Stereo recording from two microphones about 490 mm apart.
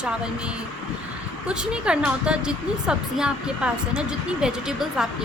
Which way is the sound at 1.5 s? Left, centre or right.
Centre.